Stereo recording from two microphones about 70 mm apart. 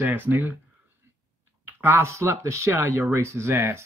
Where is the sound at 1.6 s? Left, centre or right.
Right.